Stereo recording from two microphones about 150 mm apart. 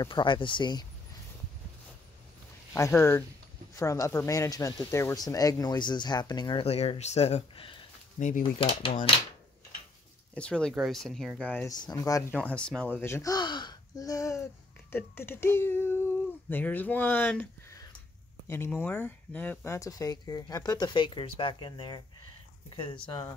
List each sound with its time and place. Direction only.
0.0 s speech: 35° left (ahead or behind)
2.7 s speech: 15° left (ahead or behind); by 7.8 s 35° left (ahead or behind)
8.2 s speech: 55° left (ahead or behind)
8.5 s speech: 35° left (ahead or behind)
10.3 s speech: 5° left (ahead or behind)
11.6 s speech: 25° left (ahead or behind)
12.4 s speech: 5° left (ahead or behind); by 23.2 s 30° left (ahead or behind)